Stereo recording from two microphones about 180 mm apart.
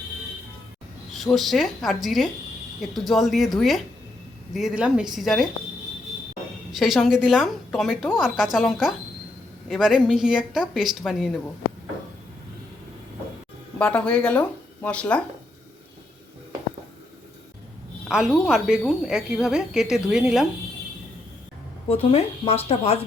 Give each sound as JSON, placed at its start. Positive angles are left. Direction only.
{"t": 1.1, "sound": "a woman's voice", "side_deg": 0}
{"t": 6.7, "sound": "a woman's voice", "side_deg": 0}
{"t": 13.7, "sound": "speech", "side_deg": 5}
{"t": 18.1, "sound": "a woman's voice", "side_deg": -5}
{"t": 21.8, "sound": "speech", "side_deg": 35}